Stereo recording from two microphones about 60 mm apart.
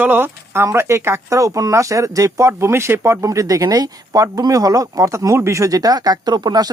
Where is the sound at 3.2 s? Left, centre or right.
Right.